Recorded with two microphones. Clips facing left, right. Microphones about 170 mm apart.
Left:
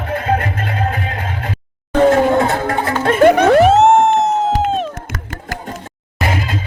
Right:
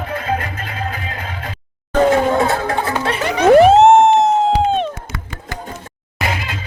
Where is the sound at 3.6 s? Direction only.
Centre (ahead or behind).